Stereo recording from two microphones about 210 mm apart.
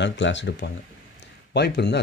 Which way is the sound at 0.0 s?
60° left (ahead or behind).